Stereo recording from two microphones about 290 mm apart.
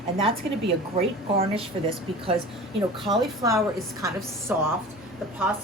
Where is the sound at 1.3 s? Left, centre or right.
Centre.